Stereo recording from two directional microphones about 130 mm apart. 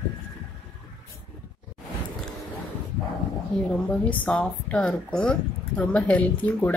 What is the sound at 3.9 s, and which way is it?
A woman's voice, 10° left (ahead or behind).